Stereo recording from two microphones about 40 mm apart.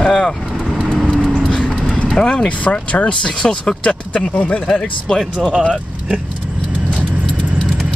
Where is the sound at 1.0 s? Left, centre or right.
Centre.